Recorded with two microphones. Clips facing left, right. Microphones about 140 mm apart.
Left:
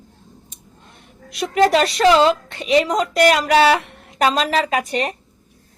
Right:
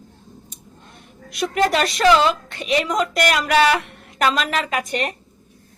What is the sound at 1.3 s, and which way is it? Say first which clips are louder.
A woman's voice: left 4 dB; 35° left (ahead or behind).